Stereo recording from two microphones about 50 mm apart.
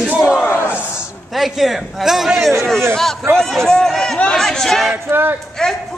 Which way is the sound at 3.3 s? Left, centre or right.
Centre.